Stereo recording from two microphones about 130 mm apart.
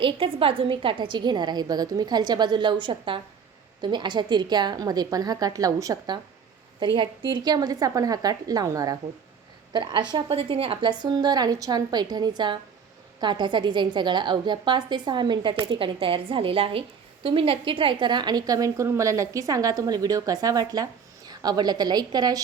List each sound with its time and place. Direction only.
0.0 s a woman's voice: 45° right (ahead or behind)